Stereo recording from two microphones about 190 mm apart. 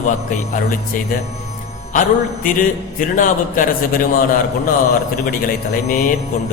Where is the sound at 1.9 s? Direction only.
45° left (ahead or behind).